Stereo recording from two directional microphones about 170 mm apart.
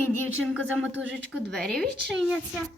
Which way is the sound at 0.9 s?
90° right.